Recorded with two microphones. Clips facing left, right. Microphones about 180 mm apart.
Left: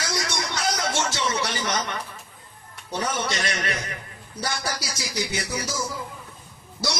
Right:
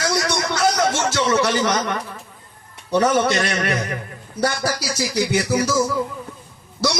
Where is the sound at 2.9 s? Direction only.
60° right (ahead or behind).